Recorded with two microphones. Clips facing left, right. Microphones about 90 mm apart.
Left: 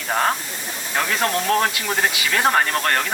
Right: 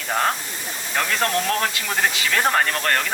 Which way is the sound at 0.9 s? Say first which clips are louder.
Left 1 dB; 10° left (ahead or behind).